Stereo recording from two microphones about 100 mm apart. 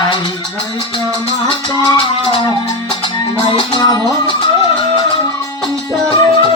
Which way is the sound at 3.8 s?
45° left (ahead or behind).